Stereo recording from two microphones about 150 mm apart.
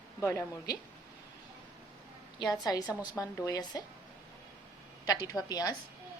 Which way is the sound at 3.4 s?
25° left (ahead or behind).